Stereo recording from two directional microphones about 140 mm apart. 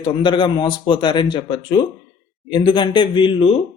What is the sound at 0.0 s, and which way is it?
A man's voice, 35° left (ahead or behind).